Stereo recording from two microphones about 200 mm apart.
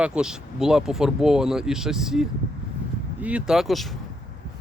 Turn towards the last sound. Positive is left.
turn(degrees=0)  # may be behind; listen again after turning